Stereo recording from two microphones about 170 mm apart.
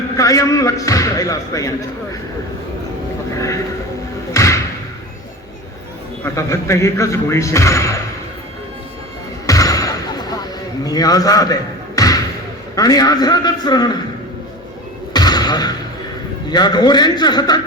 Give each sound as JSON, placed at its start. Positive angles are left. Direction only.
{"t": 0.2, "sound": "a man's voice", "side_deg": 20}
{"t": 3.3, "sound": "a man's voice", "side_deg": 20}
{"t": 4.4, "sound": "slam", "side_deg": 15}
{"t": 6.2, "sound": "speech", "side_deg": 15}
{"t": 9.5, "sound": "a sound", "side_deg": 20}
{"t": 10.8, "sound": "a man's voice", "side_deg": 20}
{"t": 11.9, "sound": "basketball bounce", "side_deg": 20}
{"t": 12.7, "sound": "a man's voice", "side_deg": 20}
{"t": 15.1, "sound": "a sound", "side_deg": 25}
{"t": 16.5, "sound": "a man's voice", "side_deg": 25}